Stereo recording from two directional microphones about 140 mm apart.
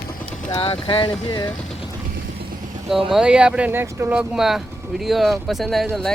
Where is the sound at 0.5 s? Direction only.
40° left (ahead or behind).